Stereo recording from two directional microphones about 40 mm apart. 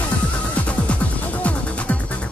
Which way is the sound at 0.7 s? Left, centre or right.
Left.